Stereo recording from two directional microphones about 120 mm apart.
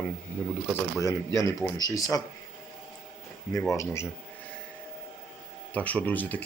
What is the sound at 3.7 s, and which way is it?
Speech, 25° left (ahead or behind).